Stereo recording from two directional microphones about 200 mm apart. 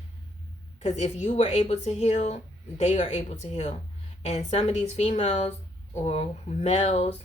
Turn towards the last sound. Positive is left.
turn(degrees=30)  # may be behind; listen again after turning